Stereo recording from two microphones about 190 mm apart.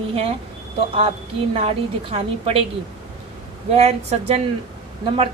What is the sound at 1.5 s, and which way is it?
A woman's voice, 30° right (ahead or behind).